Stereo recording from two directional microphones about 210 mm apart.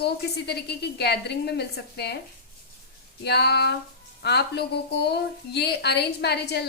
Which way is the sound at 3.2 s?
50° left (ahead or behind).